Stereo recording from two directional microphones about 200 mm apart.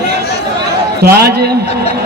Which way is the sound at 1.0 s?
50° right (ahead or behind).